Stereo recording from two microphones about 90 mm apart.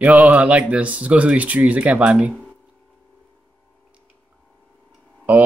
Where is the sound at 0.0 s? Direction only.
15° right (ahead or behind).